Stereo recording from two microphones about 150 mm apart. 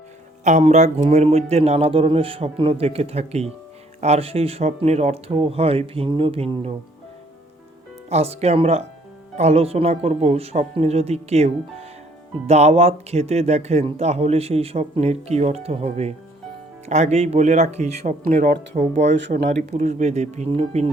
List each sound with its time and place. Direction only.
0.4 s a man's voice: 50° right (ahead or behind)
8.1 s a man's voice: 45° right (ahead or behind)